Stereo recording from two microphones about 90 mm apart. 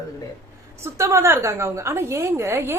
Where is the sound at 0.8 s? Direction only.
30° right (ahead or behind).